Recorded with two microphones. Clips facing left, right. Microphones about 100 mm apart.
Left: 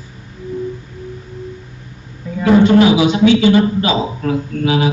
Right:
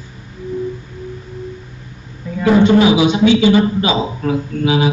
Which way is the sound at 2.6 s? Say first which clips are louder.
Even; 20° right (ahead or behind).